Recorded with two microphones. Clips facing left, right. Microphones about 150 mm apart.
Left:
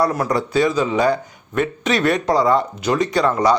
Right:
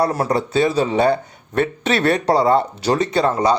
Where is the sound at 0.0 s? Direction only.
30° right (ahead or behind).